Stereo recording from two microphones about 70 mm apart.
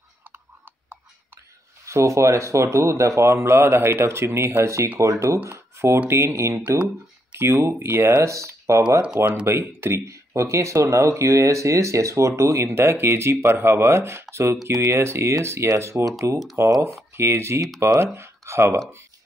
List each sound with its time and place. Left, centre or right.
1.9 s speech: right
9.0 s speech: centre
9.5 s speech: right